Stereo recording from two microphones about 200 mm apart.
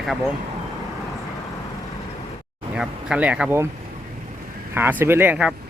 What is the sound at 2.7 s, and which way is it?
Speech, 5° right (ahead or behind).